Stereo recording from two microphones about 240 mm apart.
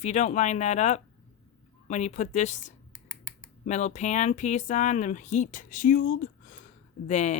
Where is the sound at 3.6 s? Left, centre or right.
Left.